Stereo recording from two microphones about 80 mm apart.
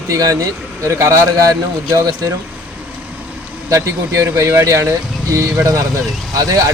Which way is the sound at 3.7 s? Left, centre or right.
Right.